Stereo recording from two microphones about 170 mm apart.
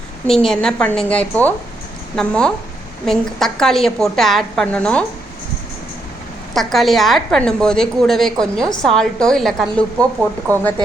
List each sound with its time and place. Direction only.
0.3 s a woman's voice: 5° left (ahead or behind)
6.5 s a woman's voice: centre (ahead or behind)